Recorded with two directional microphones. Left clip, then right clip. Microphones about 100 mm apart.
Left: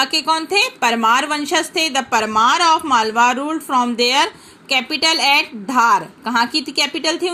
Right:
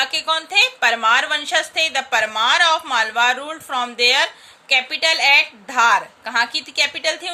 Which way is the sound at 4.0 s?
15° left (ahead or behind).